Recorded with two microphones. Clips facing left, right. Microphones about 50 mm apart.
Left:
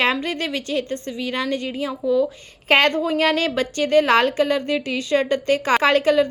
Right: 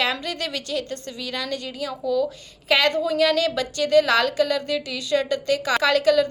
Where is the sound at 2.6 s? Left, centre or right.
Left.